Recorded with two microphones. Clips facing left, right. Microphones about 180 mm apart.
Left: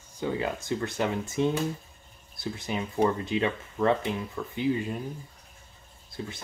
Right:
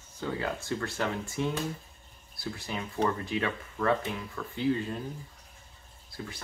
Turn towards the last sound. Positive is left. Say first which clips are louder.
# left 4 dB
turn(degrees=20)  # may be behind; listen again after turning